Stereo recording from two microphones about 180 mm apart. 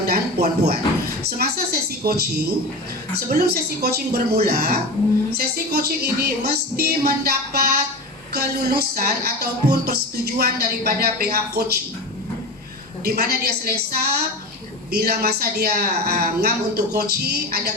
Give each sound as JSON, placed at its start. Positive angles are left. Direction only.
{"t": 0.0, "sound": "a sound", "side_deg": -55}
{"t": 1.4, "sound": "music", "side_deg": -60}
{"t": 3.2, "sound": "speech", "side_deg": -60}
{"t": 13.1, "sound": "speech", "side_deg": -60}